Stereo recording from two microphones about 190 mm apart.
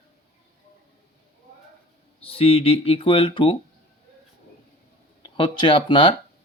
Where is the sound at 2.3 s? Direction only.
30° left (ahead or behind).